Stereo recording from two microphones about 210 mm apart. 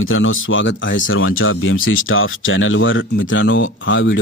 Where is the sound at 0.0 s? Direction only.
70° left (ahead or behind).